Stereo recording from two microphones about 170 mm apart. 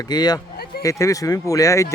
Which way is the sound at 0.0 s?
25° left (ahead or behind).